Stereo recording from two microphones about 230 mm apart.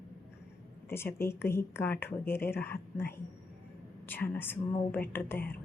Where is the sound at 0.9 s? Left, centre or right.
Centre.